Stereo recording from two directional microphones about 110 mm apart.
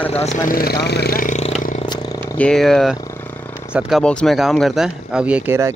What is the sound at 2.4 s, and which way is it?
Speech, 5° left (ahead or behind).